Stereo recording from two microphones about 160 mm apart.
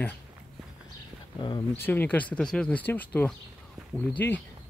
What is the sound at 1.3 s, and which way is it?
Speech, 30° left (ahead or behind).